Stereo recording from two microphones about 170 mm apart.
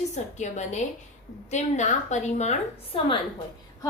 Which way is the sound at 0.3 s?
45° left (ahead or behind).